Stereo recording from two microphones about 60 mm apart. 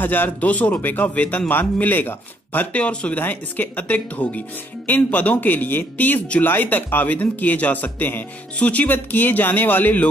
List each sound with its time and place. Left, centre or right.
0.0 s speech: left
3.2 s speech: left